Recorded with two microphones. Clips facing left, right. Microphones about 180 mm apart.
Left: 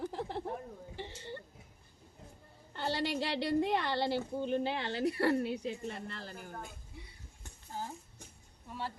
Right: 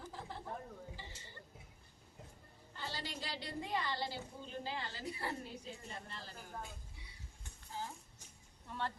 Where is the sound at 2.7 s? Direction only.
70° left (ahead or behind).